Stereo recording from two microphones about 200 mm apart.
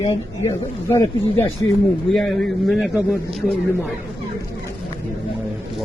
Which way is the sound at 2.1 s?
Centre (ahead or behind).